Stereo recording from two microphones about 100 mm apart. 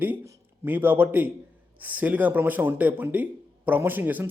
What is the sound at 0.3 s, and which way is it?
A man's voice, 20° right (ahead or behind).